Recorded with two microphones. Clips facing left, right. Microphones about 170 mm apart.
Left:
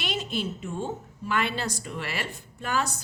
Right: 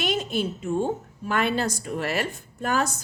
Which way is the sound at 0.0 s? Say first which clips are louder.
Right 5 dB; 50° right (ahead or behind).